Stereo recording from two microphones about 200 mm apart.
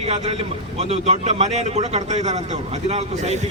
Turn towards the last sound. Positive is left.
turn(degrees=-35)  # may be behind; listen again after turning